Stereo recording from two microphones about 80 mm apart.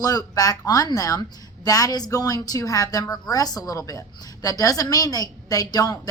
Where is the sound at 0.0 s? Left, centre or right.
Left.